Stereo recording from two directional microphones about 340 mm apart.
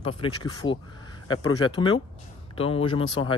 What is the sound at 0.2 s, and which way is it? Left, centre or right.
Speech, centre.